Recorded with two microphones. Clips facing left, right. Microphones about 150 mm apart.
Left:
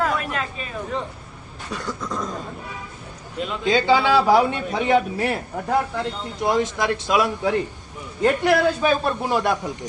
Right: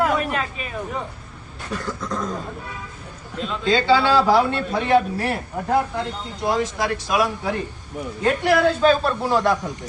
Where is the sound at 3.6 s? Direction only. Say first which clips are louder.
Even; 15° left (ahead or behind).